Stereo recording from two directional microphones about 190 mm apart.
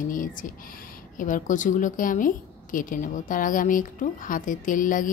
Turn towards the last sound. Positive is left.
turn(degrees=45)  # may be behind; listen again after turning